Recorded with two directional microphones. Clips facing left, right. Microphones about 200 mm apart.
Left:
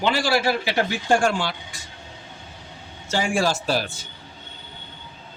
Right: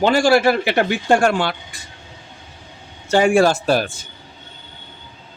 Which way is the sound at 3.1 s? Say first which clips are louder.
Right 9 dB; 60° right (ahead or behind).